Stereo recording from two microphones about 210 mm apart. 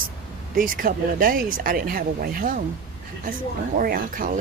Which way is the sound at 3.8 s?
40° right (ahead or behind).